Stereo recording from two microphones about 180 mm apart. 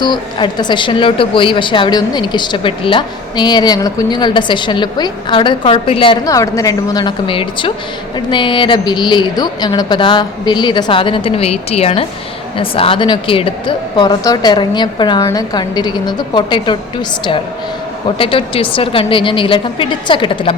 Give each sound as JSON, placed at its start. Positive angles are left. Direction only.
{"t": 0.0, "sound": "a woman's voice", "side_deg": 25}
{"t": 18.2, "sound": "a woman's voice", "side_deg": 30}